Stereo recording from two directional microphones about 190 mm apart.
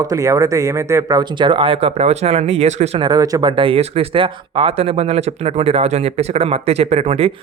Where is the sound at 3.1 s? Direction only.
20° right (ahead or behind).